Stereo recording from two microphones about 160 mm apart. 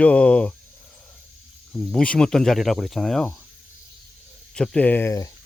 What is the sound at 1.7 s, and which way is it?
Speech, 5° left (ahead or behind).